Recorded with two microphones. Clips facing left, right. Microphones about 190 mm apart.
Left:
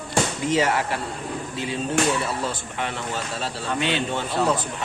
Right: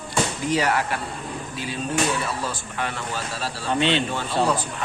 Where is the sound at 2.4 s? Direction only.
20° left (ahead or behind).